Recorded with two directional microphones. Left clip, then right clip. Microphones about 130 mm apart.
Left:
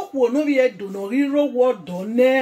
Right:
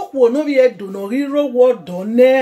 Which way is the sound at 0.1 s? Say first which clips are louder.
Right 5 dB; 25° right (ahead or behind).